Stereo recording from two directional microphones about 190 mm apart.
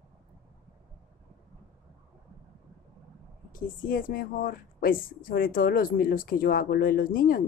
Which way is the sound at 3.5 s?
45° left (ahead or behind).